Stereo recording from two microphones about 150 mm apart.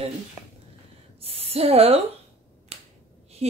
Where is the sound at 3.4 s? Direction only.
45° right (ahead or behind).